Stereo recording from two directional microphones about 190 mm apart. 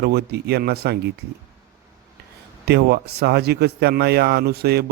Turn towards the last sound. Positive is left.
turn(degrees=-55)  # may be behind; listen again after turning